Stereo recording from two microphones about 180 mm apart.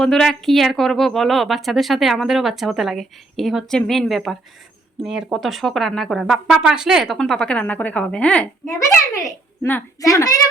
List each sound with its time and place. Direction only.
0.0 s a woman's voice: 5° left (ahead or behind); by 10.3 s 20° left (ahead or behind)